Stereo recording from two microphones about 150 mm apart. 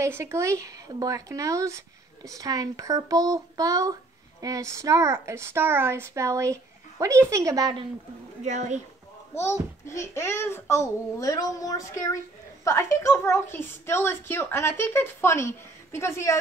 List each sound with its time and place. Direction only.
0.0 s a woman's voice: 20° right (ahead or behind)
8.5 s speech: 50° right (ahead or behind)
9.3 s a child's voice: 15° left (ahead or behind)